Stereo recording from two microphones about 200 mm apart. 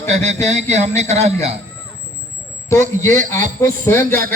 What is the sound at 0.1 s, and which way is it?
Speech, 35° right (ahead or behind).